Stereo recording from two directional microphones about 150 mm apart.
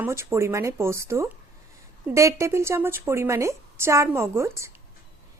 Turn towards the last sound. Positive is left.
turn(degrees=-20)  # may be behind; listen again after turning